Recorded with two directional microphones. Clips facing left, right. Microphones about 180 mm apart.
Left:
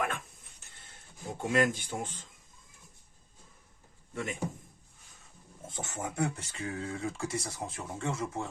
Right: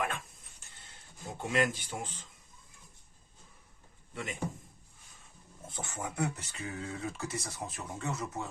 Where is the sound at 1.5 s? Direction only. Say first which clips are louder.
Left 3 dB; 50° left (ahead or behind).